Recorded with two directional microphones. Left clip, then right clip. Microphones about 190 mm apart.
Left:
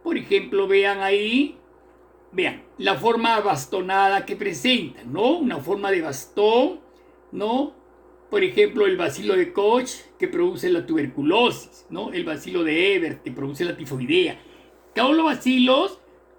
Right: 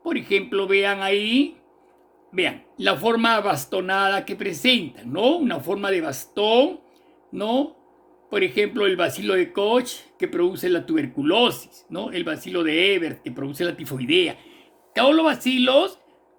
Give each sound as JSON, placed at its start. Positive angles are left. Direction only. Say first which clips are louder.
{"t": 0.0, "sound": "speech", "louder": "left 1 dB", "side_deg": -60}
{"t": 2.4, "sound": "speech", "louder": "right 1 dB", "side_deg": -60}